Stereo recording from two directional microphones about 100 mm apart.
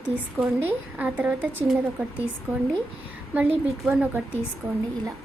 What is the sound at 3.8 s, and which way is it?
Speech, 5° right (ahead or behind).